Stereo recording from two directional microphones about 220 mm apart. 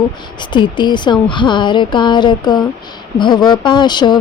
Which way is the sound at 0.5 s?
20° left (ahead or behind).